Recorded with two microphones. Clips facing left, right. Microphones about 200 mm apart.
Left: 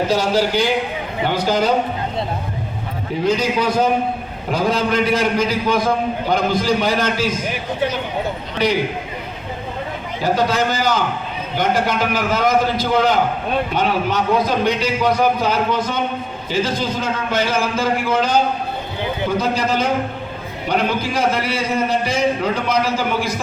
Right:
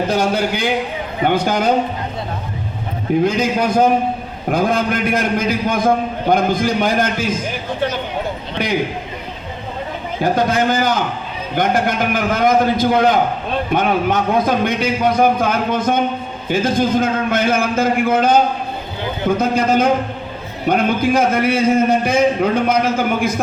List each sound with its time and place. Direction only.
0.1 s a man's voice: 55° right (ahead or behind)
3.2 s a man's voice: 50° right (ahead or behind)
10.3 s a man's voice: 50° right (ahead or behind)
19.4 s a man's voice: 50° right (ahead or behind)